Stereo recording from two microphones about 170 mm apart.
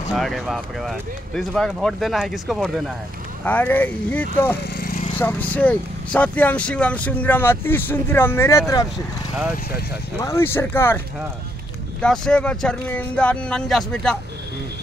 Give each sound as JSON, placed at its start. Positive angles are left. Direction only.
{"t": 0.1, "sound": "speech", "side_deg": 0}
{"t": 3.4, "sound": "speech", "side_deg": 10}
{"t": 4.6, "sound": "speech", "side_deg": 65}
{"t": 5.2, "sound": "speech", "side_deg": 10}
{"t": 10.2, "sound": "speech", "side_deg": 15}
{"t": 12.0, "sound": "speech", "side_deg": 5}